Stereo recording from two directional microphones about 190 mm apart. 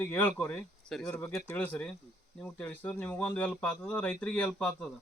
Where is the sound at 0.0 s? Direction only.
10° left (ahead or behind).